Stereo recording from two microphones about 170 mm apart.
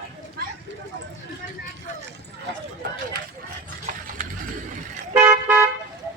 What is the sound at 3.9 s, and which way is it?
Horse, 50° right (ahead or behind).